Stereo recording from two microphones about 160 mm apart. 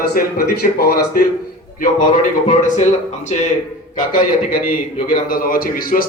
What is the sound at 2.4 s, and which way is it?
Speech, 50° left (ahead or behind).